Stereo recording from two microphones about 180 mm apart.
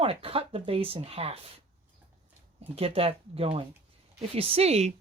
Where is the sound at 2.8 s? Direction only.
30° right (ahead or behind).